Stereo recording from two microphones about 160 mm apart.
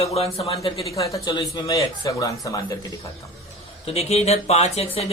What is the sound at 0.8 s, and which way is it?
Speech, 20° left (ahead or behind).